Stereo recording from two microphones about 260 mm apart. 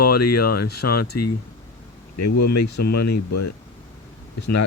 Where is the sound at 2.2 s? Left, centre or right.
Left.